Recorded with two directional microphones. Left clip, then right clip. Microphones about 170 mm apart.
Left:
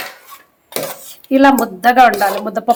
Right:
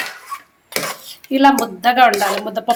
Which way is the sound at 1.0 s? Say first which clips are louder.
Left 2 dB; 35° left (ahead or behind).